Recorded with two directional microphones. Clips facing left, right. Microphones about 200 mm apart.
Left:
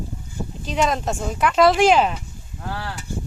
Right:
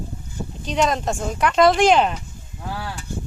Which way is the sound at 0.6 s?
Centre (ahead or behind).